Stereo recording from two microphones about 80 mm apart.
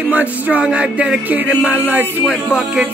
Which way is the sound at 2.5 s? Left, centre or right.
Centre.